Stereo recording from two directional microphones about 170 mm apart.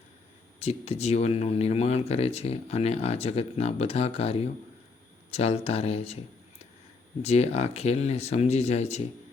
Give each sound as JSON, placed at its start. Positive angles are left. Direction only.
{"t": 0.6, "sound": "speech", "side_deg": 35}
{"t": 7.2, "sound": "speech", "side_deg": 40}